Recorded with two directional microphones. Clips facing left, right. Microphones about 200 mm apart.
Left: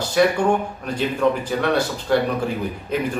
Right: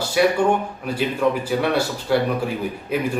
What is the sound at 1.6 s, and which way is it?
Speech, 10° right (ahead or behind).